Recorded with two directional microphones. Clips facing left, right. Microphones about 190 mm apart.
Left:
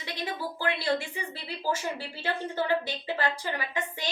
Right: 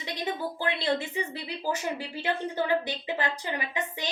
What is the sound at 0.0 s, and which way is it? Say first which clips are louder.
Speech: right 2 dB; 20° right (ahead or behind).